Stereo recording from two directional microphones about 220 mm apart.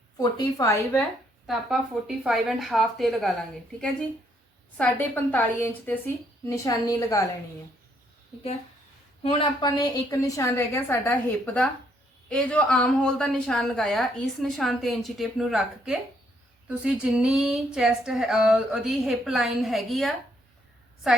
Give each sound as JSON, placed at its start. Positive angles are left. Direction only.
{"t": 0.2, "sound": "a woman's voice", "side_deg": 15}
{"t": 1.5, "sound": "a woman's voice", "side_deg": -5}
{"t": 4.8, "sound": "a woman's voice", "side_deg": 10}
{"t": 9.2, "sound": "a woman's voice", "side_deg": 25}